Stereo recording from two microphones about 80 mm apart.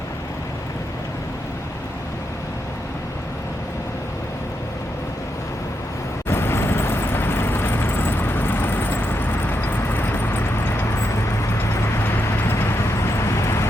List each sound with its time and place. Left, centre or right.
6.2 s vehicle: left